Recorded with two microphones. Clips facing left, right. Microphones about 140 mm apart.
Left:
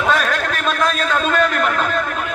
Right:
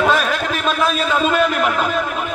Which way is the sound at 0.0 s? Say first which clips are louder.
Right 1 dB; 5° right (ahead or behind).